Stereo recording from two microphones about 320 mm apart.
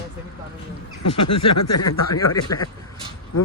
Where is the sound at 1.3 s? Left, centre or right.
Left.